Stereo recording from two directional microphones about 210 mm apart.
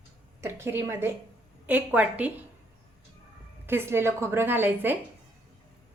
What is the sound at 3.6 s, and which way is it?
A woman's voice, 10° right (ahead or behind).